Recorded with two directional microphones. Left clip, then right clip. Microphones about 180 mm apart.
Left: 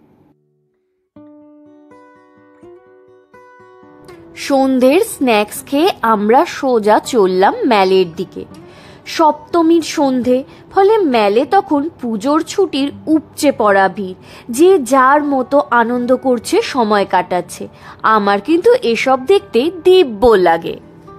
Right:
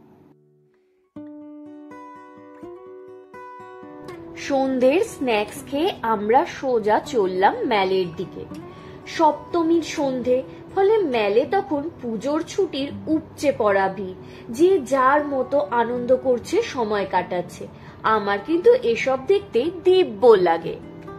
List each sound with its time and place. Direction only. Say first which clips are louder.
4.4 s a woman's voice: left 8 dB; 45° left (ahead or behind); by 8.3 s 60° left (ahead or behind)
9.0 s a woman's voice: left 6 dB; 70° left (ahead or behind); by 20.8 s 50° left (ahead or behind)